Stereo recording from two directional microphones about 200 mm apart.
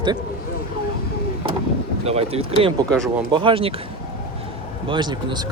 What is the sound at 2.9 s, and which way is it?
Speech, 5° left (ahead or behind).